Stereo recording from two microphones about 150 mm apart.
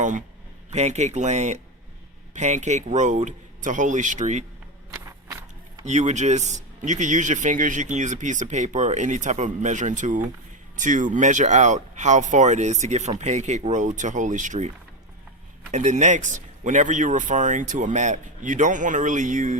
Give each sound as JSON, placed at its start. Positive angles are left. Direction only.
{"t": 0.0, "sound": "a man's voice", "side_deg": -55}
{"t": 5.8, "sound": "speech", "side_deg": -50}
{"t": 15.7, "sound": "speech", "side_deg": -55}